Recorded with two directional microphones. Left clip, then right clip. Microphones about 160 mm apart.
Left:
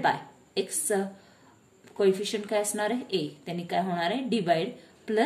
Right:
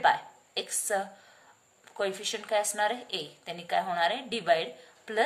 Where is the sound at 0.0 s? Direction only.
20° right (ahead or behind).